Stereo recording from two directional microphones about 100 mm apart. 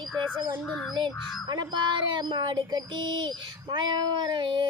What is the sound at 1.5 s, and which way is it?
Speech, 45° right (ahead or behind).